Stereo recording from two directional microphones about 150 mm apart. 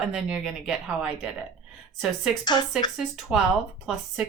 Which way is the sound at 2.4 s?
30° left (ahead or behind).